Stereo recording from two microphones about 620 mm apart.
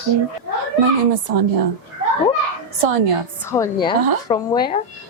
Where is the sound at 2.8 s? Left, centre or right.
Right.